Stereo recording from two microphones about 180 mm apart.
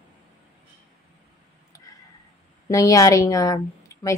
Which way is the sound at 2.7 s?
20° left (ahead or behind).